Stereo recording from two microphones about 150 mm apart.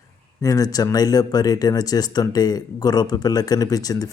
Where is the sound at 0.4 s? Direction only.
25° left (ahead or behind).